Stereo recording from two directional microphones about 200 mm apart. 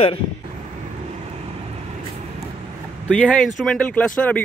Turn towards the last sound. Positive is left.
turn(degrees=5)  # may be behind; listen again after turning